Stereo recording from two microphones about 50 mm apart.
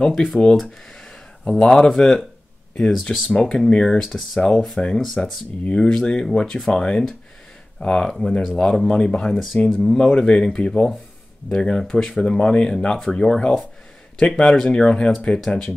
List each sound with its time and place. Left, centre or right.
0.0 s speech: centre
1.6 s speech: centre
3.3 s speech: left
3.5 s speech: centre
4.0 s speech: centre
4.7 s speech: centre
9.3 s speech: centre
9.9 s speech: centre